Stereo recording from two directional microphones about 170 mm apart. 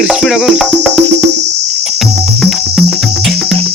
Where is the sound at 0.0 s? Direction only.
5° right (ahead or behind).